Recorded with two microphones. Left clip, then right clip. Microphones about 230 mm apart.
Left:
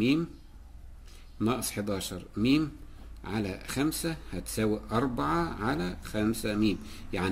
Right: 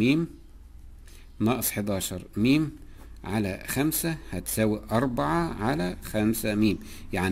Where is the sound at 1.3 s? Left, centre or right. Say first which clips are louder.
Right 3 dB; right.